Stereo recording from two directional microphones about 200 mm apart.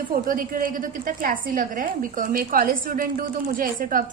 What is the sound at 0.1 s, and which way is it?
A woman's voice, 45° right (ahead or behind).